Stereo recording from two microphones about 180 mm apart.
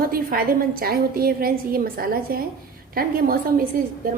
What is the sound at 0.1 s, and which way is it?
A woman's voice, 55° right (ahead or behind).